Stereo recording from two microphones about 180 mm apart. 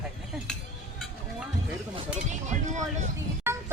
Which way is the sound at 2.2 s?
40° right (ahead or behind).